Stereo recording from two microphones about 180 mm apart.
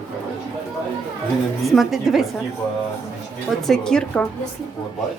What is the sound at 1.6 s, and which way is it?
Speech, centre (ahead or behind).